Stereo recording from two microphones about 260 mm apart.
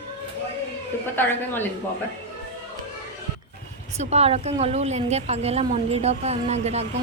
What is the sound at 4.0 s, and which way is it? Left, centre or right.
Speech, right.